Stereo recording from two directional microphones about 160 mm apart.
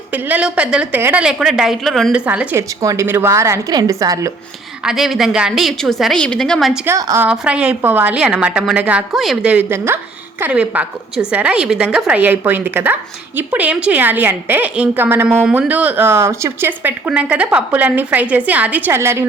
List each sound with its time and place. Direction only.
0.1 s a woman's voice: 10° right (ahead or behind)
4.9 s a woman's voice: centre (ahead or behind)
6.8 s a woman's voice: 15° right (ahead or behind)